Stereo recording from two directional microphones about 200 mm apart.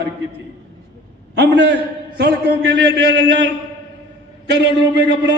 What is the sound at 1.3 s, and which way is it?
A man's voice, 55° right (ahead or behind).